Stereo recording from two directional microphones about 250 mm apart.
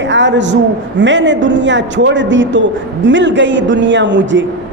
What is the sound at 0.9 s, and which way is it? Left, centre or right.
A woman's voice, right.